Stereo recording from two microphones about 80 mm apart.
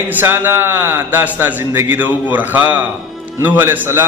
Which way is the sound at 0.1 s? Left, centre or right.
Right.